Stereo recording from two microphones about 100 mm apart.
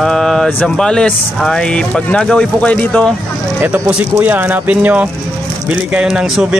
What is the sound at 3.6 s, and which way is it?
Speech, 15° right (ahead or behind).